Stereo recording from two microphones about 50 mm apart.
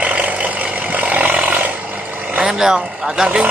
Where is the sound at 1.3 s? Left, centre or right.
Right.